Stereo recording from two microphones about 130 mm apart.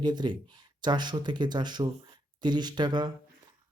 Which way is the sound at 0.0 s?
35° right (ahead or behind).